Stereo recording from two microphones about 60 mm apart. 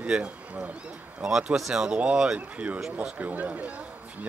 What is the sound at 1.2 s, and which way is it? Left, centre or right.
A man's voice, centre.